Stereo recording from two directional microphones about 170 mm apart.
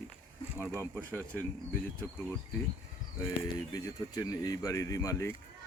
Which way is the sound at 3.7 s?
20° left (ahead or behind).